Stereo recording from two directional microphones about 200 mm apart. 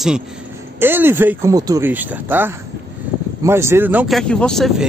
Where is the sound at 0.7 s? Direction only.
10° right (ahead or behind).